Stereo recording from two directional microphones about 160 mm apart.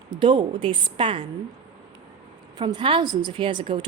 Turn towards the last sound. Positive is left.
turn(degrees=-30)  # may be behind; listen again after turning